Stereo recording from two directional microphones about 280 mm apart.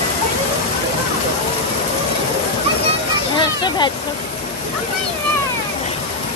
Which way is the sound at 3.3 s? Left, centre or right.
Centre.